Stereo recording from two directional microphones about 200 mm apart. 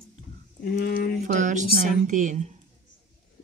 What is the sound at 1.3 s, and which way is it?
Speech, 40° right (ahead or behind).